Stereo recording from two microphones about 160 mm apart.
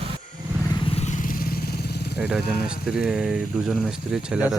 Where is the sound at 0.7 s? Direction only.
35° left (ahead or behind); by 2.1 s 90° left.